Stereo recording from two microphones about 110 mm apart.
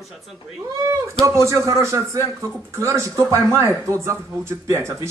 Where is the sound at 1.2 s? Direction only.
25° right (ahead or behind).